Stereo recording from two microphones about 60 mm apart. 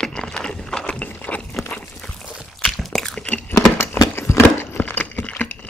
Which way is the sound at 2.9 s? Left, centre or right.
Centre.